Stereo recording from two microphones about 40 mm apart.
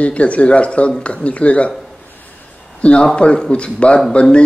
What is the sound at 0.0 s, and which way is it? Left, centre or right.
Speech, left.